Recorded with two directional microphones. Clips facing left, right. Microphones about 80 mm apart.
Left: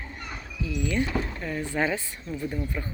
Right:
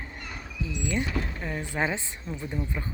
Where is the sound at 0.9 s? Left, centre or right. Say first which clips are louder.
Left 2 dB; right.